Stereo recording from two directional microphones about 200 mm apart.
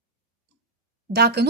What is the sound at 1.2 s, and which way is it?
Speech, 55° right (ahead or behind).